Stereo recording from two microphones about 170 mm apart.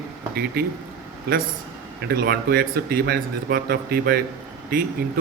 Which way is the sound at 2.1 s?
65° right (ahead or behind).